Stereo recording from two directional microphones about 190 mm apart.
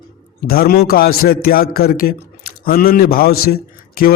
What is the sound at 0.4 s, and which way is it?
A man's voice, 50° left (ahead or behind).